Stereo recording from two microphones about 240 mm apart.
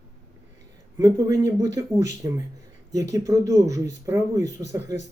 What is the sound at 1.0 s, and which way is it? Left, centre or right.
Speech, centre.